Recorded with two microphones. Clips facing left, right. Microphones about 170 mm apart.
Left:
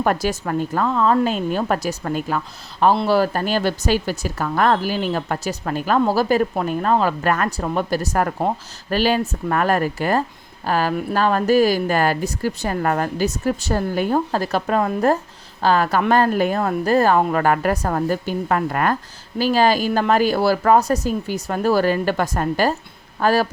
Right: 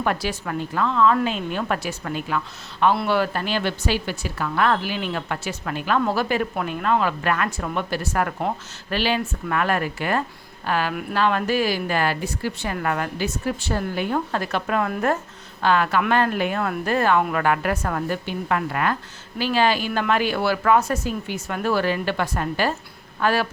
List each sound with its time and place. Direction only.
0.0 s speech: 45° left (ahead or behind)